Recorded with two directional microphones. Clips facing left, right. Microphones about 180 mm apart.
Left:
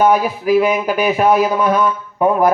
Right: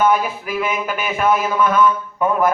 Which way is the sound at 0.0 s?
40° left (ahead or behind).